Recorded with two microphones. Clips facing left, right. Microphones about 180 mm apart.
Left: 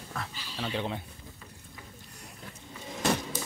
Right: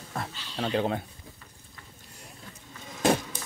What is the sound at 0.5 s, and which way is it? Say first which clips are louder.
Speech: right 6 dB; 45° right (ahead or behind).